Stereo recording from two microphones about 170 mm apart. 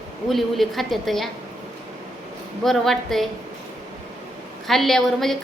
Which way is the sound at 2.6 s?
Centre (ahead or behind).